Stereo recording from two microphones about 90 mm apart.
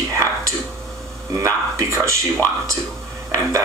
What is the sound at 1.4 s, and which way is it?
Speech, 35° right (ahead or behind).